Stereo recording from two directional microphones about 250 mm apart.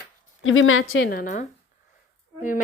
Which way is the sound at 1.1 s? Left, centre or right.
Left.